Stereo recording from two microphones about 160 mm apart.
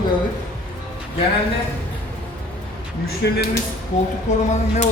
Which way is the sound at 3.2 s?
90° left.